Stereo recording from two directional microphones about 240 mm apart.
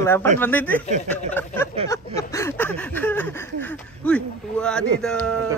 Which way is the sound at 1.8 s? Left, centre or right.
Centre.